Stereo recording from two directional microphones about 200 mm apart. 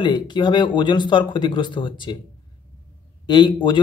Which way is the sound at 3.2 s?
25° left (ahead or behind).